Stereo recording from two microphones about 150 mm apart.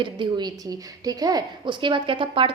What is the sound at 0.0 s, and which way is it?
A woman's voice, 30° right (ahead or behind).